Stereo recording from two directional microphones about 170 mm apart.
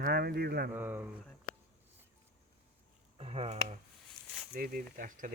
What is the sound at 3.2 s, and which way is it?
Speech, 35° right (ahead or behind).